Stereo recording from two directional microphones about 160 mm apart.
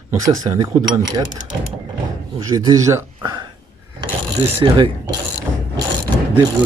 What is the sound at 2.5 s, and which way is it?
Speech, 20° right (ahead or behind).